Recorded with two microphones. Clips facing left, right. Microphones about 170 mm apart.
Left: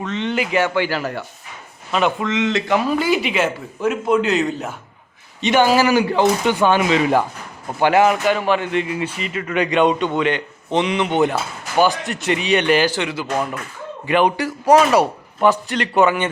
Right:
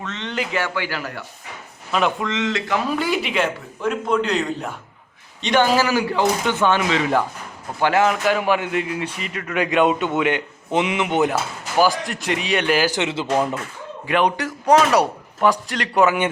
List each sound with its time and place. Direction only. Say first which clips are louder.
0.0 s speech: left 5 dB; 10° left (ahead or behind); by 1.2 s 30° left (ahead or behind)
1.9 s a man's voice: left 2 dB; centre (ahead or behind)
2.4 s speech: left 5 dB; 20° left (ahead or behind)
2.9 s a man's voice: left 3 dB; centre (ahead or behind); by 8.1 s 15° left (ahead or behind)
8.2 s a man's voice: left 1 dB; 5° right (ahead or behind)
12.9 s speech: right 1 dB; 20° right (ahead or behind)
14.1 s a man's voice: left 3 dB; 5° left (ahead or behind)